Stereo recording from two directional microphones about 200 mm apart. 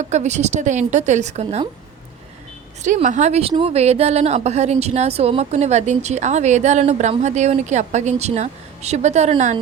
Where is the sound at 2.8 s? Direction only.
35° right (ahead or behind).